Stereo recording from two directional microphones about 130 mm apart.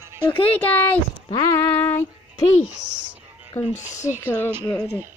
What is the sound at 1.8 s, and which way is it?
Female singing, 20° left (ahead or behind).